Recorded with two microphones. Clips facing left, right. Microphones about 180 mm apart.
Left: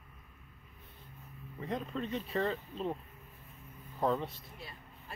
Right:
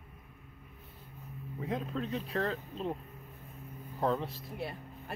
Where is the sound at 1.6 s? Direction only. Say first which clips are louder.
Right 1 dB; centre (ahead or behind).